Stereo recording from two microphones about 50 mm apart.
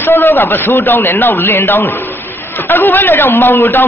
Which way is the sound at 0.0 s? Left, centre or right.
Left.